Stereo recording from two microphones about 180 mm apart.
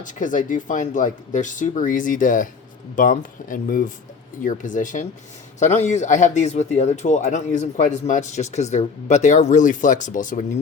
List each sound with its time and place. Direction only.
0.0 s speech: 45° left (ahead or behind)